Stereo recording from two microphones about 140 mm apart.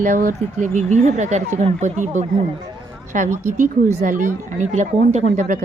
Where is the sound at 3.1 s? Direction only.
65° right (ahead or behind).